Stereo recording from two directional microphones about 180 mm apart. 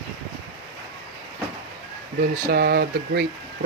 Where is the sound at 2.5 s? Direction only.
60° right (ahead or behind).